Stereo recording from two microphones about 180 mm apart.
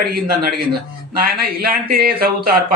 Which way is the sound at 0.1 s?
60° right (ahead or behind).